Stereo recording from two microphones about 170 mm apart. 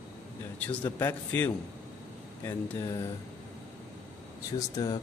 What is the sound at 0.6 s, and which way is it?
A man's voice, 10° left (ahead or behind).